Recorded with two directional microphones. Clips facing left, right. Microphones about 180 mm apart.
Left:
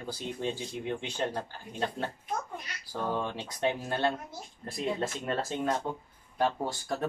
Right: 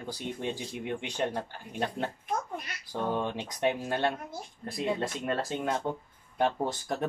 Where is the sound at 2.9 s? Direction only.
15° right (ahead or behind).